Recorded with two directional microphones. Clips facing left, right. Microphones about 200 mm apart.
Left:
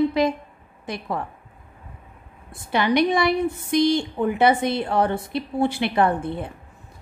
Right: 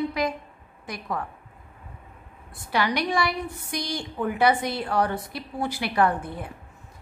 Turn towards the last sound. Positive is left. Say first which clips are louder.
# left 3 dB
turn(degrees=25)  # may be behind; listen again after turning